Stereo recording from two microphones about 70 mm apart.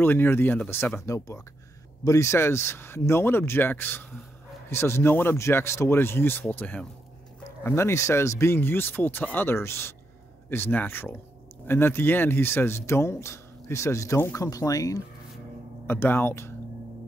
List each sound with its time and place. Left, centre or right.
0.0 s speech: left
1.0 s speech: left
4.6 s speech: left
7.6 s speech: left
15.9 s speech: left